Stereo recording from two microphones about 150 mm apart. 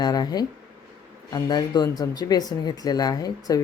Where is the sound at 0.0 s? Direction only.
25° left (ahead or behind).